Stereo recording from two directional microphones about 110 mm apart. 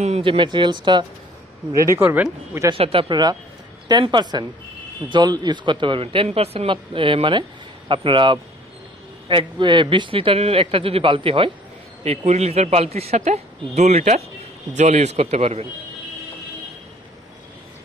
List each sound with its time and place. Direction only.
0.2 s speech: 50° right (ahead or behind)
1.8 s speech: 25° right (ahead or behind)
2.0 s speech: 10° right (ahead or behind)
2.7 s speech: 55° right (ahead or behind)
3.9 s speech: 45° right (ahead or behind)
12.3 s a man's voice: 75° right (ahead or behind)